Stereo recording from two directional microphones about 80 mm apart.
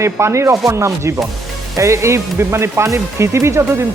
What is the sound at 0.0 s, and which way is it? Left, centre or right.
Speech, right.